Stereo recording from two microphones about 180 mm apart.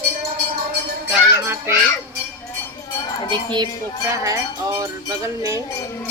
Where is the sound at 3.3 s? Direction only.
25° right (ahead or behind).